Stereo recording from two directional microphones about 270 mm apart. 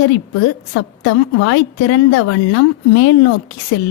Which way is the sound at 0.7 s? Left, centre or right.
Left.